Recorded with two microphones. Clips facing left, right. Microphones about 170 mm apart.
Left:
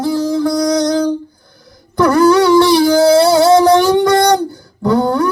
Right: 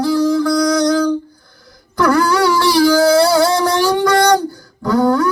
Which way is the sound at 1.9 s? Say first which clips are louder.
Left 4 dB; 25° left (ahead or behind).